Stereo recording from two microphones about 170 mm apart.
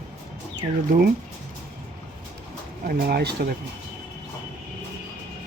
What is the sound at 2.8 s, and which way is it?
Speech, 65° right (ahead or behind).